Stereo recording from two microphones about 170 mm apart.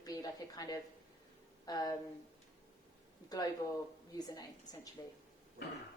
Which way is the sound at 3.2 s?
25° left (ahead or behind).